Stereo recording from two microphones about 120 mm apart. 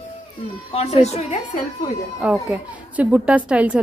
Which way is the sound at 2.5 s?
10° right (ahead or behind).